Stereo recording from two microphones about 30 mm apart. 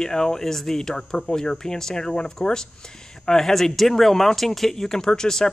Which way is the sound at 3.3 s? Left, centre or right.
Centre.